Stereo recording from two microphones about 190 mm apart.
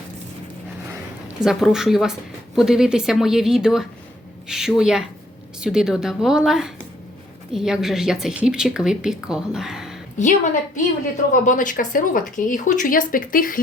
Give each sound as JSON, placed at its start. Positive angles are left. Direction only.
{"t": 1.4, "sound": "speech", "side_deg": 0}
{"t": 10.2, "sound": "a woman's voice", "side_deg": 40}